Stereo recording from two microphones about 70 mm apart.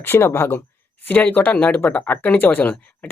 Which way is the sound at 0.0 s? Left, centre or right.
Left.